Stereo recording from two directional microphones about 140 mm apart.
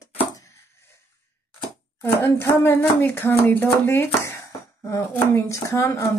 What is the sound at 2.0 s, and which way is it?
A woman's voice, 15° left (ahead or behind).